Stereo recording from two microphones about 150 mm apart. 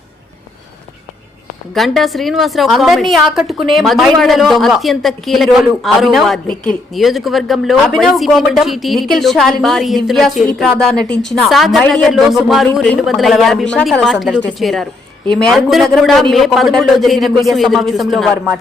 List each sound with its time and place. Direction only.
1.7 s speech: centre (ahead or behind)